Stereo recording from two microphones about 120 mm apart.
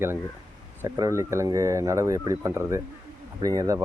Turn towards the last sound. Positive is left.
turn(degrees=-30)  # may be behind; listen again after turning